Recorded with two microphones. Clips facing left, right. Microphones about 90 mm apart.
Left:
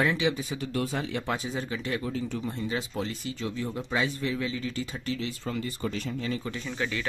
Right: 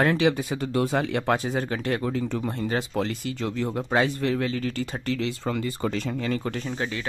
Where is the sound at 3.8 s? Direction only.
55° right (ahead or behind); by 6.4 s 90° right.